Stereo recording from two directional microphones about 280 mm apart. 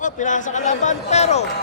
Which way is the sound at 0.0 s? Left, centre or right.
Left.